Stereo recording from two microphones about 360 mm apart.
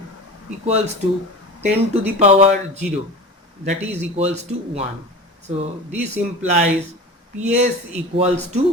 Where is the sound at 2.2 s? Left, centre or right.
Centre.